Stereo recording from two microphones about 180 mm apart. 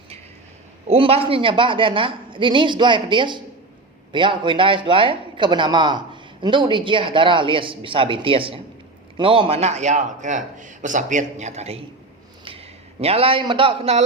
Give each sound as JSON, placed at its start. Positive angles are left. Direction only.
{"t": 0.9, "sound": "a woman's voice", "side_deg": -30}